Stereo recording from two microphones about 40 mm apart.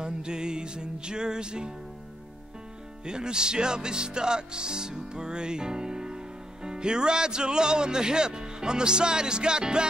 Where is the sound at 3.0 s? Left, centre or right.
Centre.